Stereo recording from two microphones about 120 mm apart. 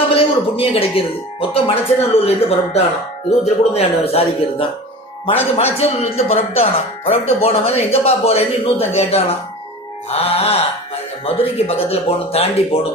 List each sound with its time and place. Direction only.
0.1 s speech: 50° left (ahead or behind)
5.7 s speech: 55° left (ahead or behind)